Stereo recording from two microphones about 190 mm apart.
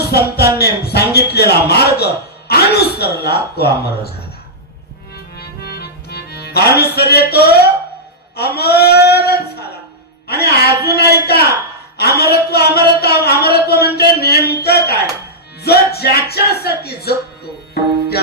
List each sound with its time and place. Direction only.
0.1 s speech: 55° left (ahead or behind)
5.1 s music: 55° left (ahead or behind)
8.4 s a man's voice: 55° left (ahead or behind)